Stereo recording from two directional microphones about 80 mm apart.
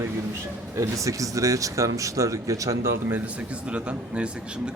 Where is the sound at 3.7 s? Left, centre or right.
Centre.